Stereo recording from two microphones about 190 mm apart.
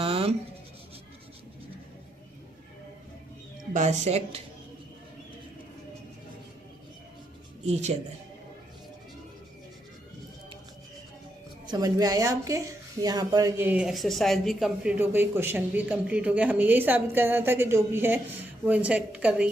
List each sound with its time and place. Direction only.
0.0 s writing: 30° right (ahead or behind)
3.7 s speech: 40° right (ahead or behind)
7.6 s speech: 35° right (ahead or behind)
11.6 s speech: 20° right (ahead or behind)